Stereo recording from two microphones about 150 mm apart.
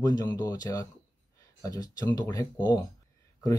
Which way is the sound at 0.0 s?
25° left (ahead or behind).